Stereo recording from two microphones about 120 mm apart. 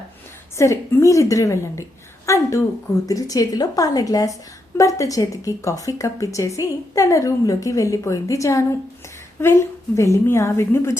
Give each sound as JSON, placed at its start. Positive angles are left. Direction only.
{"t": 0.5, "sound": "a woman's voice", "side_deg": 25}